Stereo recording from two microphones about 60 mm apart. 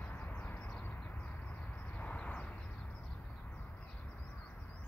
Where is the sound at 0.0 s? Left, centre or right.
Left.